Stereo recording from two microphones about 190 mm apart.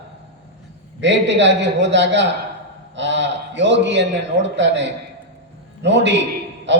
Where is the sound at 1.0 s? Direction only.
70° right (ahead or behind).